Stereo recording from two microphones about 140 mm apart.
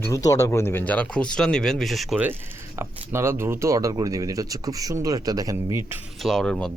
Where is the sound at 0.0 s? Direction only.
25° left (ahead or behind); by 2.1 s centre (ahead or behind).